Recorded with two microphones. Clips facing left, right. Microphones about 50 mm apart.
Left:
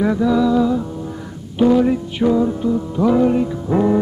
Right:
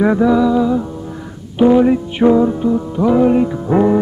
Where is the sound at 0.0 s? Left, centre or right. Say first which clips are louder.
Right 4 dB; right.